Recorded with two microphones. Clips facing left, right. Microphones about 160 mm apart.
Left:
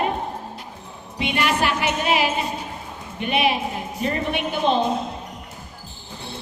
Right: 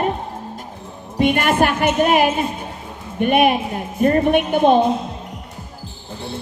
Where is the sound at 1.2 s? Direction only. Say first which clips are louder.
Right 6 dB; 50° right (ahead or behind).